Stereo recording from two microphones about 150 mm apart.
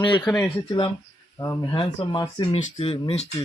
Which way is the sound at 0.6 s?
35° left (ahead or behind).